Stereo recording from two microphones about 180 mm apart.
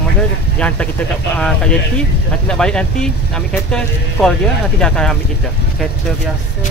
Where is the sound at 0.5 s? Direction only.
5° left (ahead or behind).